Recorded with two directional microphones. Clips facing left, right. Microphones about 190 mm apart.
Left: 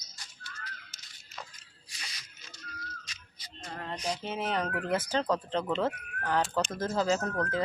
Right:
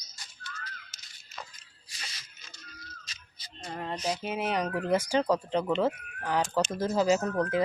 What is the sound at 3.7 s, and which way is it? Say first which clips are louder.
Music: right 4 dB; 20° right (ahead or behind).